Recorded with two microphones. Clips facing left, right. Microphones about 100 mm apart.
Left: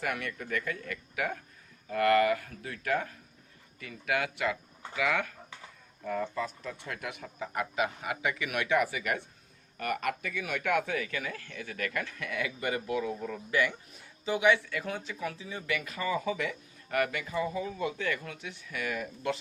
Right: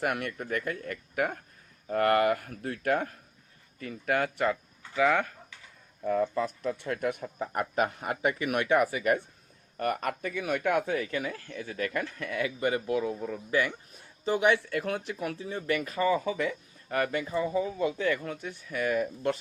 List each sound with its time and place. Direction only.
0.0 s speech: 50° right (ahead or behind)
3.8 s speech: 35° right (ahead or behind)
14.3 s speech: 45° right (ahead or behind)